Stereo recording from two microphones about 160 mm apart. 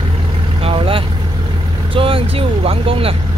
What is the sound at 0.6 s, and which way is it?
Vehicle, 35° right (ahead or behind).